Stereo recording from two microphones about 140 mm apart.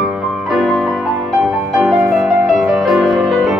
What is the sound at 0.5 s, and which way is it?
Music, centre (ahead or behind).